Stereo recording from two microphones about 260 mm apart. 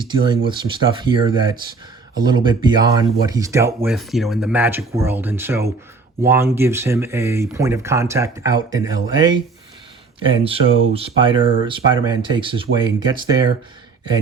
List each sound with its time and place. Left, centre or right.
0.1 s speech: centre
3.8 s speech: centre